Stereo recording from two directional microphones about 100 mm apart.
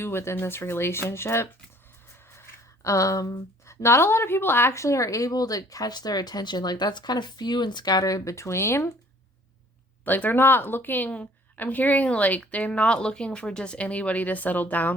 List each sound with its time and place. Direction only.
0.0 s speech: 25° left (ahead or behind)
2.4 s a sound: 30° left (ahead or behind)
3.7 s speech: 25° left (ahead or behind)
10.0 s a woman's voice: 20° left (ahead or behind)